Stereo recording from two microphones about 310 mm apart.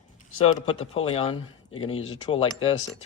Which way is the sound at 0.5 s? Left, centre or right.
Centre.